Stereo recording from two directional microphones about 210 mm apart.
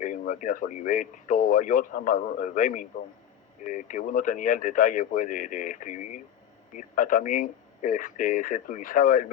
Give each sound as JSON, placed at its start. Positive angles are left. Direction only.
{"t": 0.0, "sound": "speech", "side_deg": 40}